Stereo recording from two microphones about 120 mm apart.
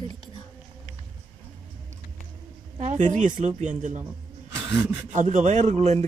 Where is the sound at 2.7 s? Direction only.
80° right.